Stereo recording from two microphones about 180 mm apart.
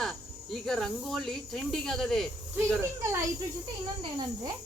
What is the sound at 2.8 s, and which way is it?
Speech, 15° right (ahead or behind).